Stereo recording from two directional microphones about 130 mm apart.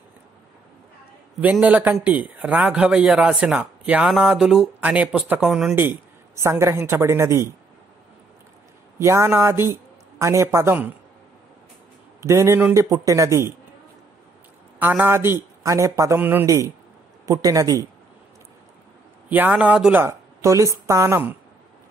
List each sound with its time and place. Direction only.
1.4 s a man's voice: 10° right (ahead or behind)
5.8 s speech: 20° right (ahead or behind)
8.9 s a man's voice: 20° right (ahead or behind)
12.2 s speech: 25° right (ahead or behind)
14.8 s speech: 15° right (ahead or behind)
19.2 s speech: 15° right (ahead or behind)